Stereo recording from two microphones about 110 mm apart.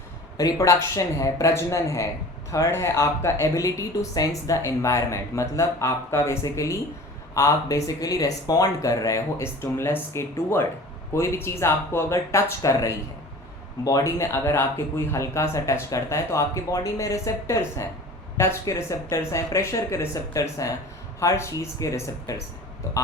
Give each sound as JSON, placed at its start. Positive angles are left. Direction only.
{"t": 0.3, "sound": "speech", "side_deg": 30}